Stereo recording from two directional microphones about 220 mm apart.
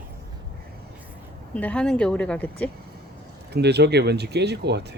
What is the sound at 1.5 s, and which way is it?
A woman's voice, 5° left (ahead or behind).